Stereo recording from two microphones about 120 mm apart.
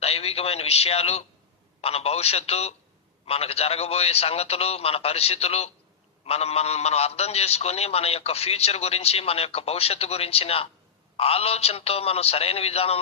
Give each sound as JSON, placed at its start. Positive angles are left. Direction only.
{"t": 0.0, "sound": "a man's voice", "side_deg": 55}